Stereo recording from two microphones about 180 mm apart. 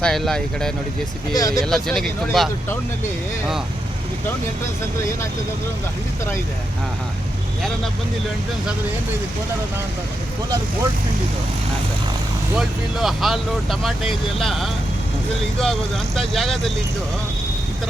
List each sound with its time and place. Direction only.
0.0 s speech: 5° left (ahead or behind)
1.3 s speech: 20° left (ahead or behind)
1.6 s speech: centre (ahead or behind)
12.5 s speech: centre (ahead or behind)